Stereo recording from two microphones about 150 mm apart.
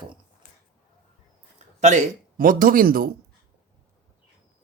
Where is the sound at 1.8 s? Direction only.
50° right (ahead or behind); by 3.1 s 75° right (ahead or behind).